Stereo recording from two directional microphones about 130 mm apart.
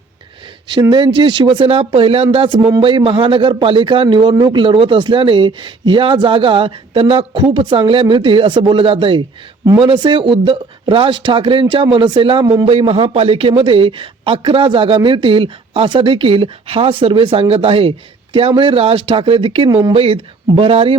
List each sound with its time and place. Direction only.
0.7 s a man's voice: 35° right (ahead or behind)